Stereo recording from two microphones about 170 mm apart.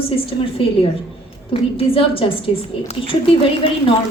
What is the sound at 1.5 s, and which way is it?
Speech, 35° left (ahead or behind).